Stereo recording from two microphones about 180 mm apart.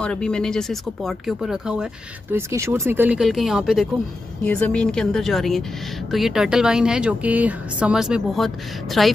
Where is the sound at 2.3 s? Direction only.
15° right (ahead or behind).